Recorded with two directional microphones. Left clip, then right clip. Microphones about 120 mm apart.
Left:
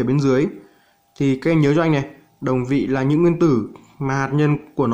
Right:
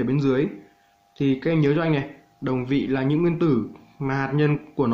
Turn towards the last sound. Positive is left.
turn(degrees=25)  # may be behind; listen again after turning